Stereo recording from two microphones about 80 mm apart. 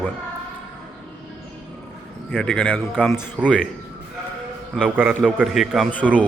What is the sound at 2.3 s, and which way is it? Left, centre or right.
Speech, centre.